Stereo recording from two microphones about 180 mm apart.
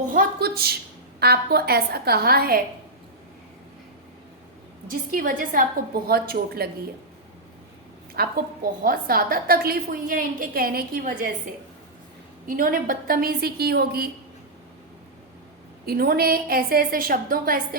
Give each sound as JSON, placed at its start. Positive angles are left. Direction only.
{"t": 0.1, "sound": "a woman's voice", "side_deg": -55}
{"t": 4.9, "sound": "a woman's voice", "side_deg": -50}
{"t": 8.1, "sound": "a woman's voice", "side_deg": -55}
{"t": 12.5, "sound": "a woman's voice", "side_deg": -50}
{"t": 15.9, "sound": "a woman's voice", "side_deg": -55}